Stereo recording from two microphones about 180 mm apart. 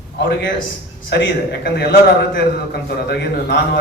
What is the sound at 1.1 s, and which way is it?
Speech, 65° left (ahead or behind).